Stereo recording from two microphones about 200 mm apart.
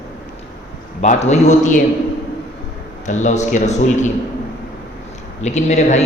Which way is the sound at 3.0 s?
35° left (ahead or behind).